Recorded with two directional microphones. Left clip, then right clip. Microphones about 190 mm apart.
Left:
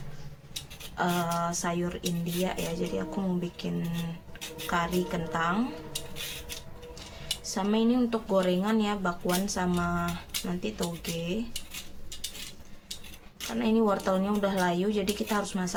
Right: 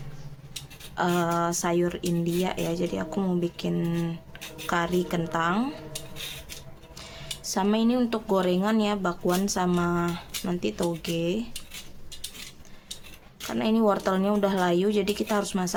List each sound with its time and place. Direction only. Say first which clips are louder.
0.9 s speech: right 4 dB; 65° right (ahead or behind)
7.4 s speech: right 3 dB; 65° right (ahead or behind)
13.6 s speech: right 3 dB; 65° right (ahead or behind)